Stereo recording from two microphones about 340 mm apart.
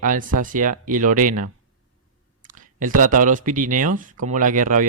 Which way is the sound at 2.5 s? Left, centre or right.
Right.